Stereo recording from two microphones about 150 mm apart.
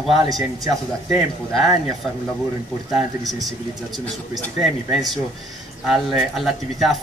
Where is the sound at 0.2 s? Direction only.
25° right (ahead or behind).